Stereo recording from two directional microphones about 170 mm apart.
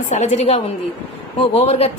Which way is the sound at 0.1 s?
45° left (ahead or behind).